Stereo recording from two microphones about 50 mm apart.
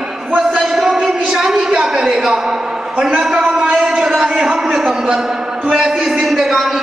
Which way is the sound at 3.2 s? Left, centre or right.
Centre.